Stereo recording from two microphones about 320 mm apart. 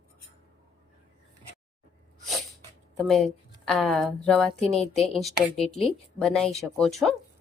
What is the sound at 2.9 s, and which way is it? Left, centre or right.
Speech, centre.